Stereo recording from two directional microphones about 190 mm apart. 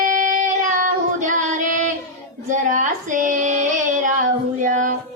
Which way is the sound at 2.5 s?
40° right (ahead or behind).